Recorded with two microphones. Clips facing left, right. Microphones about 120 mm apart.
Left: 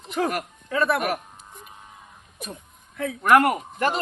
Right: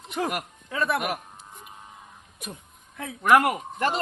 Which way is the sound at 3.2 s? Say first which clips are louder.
Left 2 dB; 5° right (ahead or behind).